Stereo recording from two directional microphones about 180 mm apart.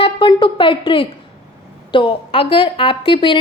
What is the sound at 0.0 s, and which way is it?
A woman's voice, 30° left (ahead or behind).